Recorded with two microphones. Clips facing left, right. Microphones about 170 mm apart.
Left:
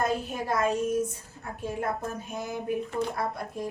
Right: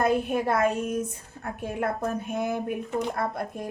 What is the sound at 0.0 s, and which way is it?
A woman's voice, 60° right (ahead or behind).